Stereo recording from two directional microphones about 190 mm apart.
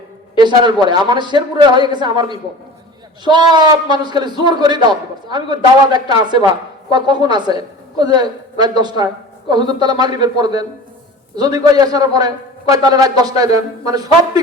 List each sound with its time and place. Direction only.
0.3 s a man's voice: 25° right (ahead or behind)